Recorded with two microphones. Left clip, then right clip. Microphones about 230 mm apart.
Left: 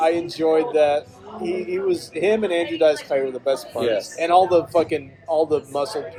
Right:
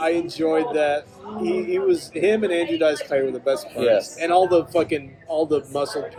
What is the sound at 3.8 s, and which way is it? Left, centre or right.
Speech, right.